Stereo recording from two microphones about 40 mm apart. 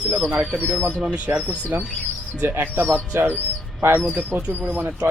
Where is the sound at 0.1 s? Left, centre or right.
Right.